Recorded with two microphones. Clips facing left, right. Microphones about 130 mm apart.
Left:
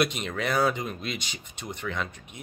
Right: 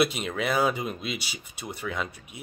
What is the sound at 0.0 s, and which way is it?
Speech, 5° right (ahead or behind).